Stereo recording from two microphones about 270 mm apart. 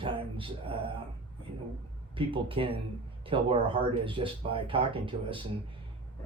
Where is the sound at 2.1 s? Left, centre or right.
Centre.